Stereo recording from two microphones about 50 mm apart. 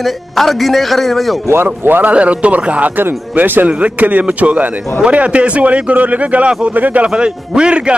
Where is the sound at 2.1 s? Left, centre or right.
Right.